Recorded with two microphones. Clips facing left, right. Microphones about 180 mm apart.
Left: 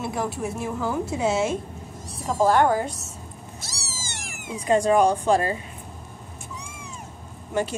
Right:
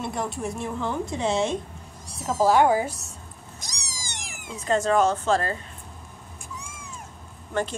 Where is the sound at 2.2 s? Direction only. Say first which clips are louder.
Even; 5° right (ahead or behind).